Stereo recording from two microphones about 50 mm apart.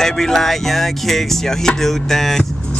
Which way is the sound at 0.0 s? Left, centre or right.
Centre.